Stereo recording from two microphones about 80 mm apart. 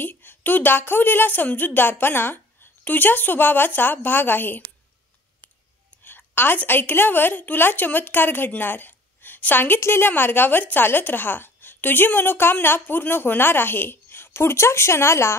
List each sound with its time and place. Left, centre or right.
0.0 s a woman's voice: left
6.0 s a woman's voice: left